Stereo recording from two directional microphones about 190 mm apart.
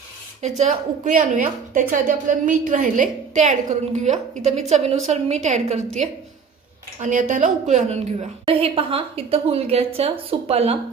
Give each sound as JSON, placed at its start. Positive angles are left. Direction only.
{"t": 0.4, "sound": "a woman's voice", "side_deg": -40}